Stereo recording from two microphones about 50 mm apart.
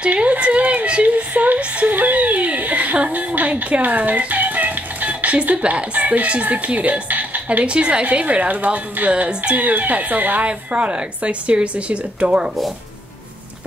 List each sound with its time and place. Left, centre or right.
0.0 s a sound: right
3.3 s speech: right
9.6 s speech: right